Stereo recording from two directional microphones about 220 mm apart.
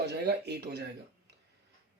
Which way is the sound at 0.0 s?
50° right (ahead or behind).